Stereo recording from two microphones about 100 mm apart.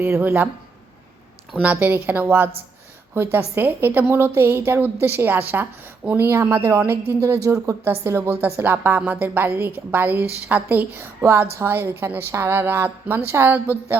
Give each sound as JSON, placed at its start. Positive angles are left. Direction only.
{"t": 0.0, "sound": "a woman's voice", "side_deg": -20}
{"t": 1.6, "sound": "a woman's voice", "side_deg": -15}